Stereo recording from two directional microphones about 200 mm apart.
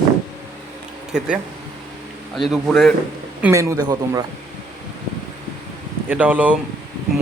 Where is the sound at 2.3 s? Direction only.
Centre (ahead or behind).